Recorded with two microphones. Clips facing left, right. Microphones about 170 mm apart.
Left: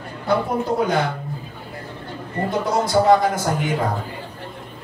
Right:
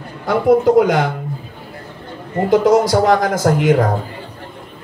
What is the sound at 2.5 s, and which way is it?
A man's voice, 90° right.